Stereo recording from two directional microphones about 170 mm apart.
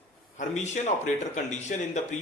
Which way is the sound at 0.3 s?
45° left (ahead or behind).